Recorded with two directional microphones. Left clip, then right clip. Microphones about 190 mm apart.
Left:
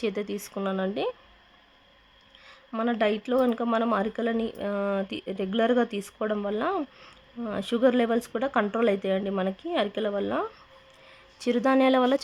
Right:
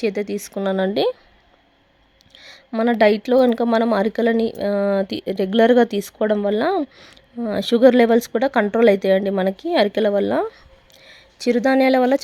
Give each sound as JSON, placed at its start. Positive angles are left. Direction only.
{"t": 0.0, "sound": "speech", "side_deg": -25}
{"t": 2.5, "sound": "speech", "side_deg": -30}
{"t": 11.3, "sound": "speech", "side_deg": -25}